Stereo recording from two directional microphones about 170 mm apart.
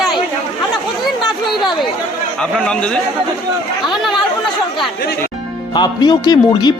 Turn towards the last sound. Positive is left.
turn(degrees=25)  # may be behind; listen again after turning